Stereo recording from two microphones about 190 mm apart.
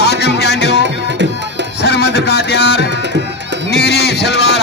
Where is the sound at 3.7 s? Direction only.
60° left (ahead or behind).